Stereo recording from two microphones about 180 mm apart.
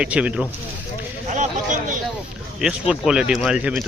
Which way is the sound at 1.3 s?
45° right (ahead or behind).